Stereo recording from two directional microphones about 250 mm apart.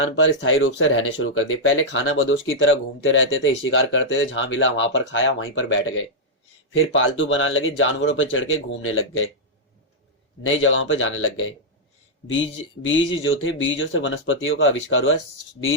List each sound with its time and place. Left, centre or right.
0.0 s speech: left
10.4 s speech: left